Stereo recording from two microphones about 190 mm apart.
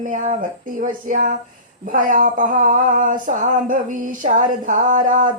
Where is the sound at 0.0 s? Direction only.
40° right (ahead or behind).